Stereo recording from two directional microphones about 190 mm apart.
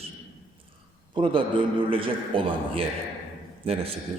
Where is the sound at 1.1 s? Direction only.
25° right (ahead or behind).